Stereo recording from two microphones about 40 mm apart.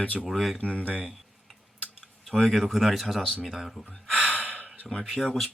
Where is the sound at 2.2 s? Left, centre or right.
Centre.